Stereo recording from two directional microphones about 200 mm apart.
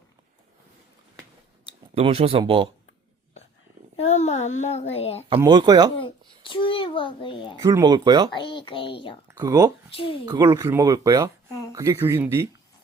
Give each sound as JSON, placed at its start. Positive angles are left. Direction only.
{"t": 2.0, "sound": "speech", "side_deg": -30}
{"t": 3.9, "sound": "a sound", "side_deg": 35}
{"t": 4.6, "sound": "speech", "side_deg": 35}
{"t": 5.4, "sound": "speech", "side_deg": -20}
{"t": 6.0, "sound": "a child's voice", "side_deg": 25}
{"t": 7.6, "sound": "speech", "side_deg": -15}
{"t": 8.4, "sound": "a child's voice", "side_deg": 25}
{"t": 9.2, "sound": "speech", "side_deg": -15}
{"t": 9.9, "sound": "a child's voice", "side_deg": 25}
{"t": 10.2, "sound": "speech", "side_deg": -15}